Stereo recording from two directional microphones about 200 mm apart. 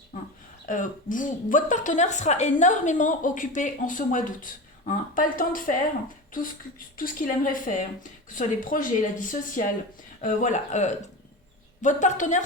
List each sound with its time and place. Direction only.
0.6 s a woman's voice: 40° left (ahead or behind)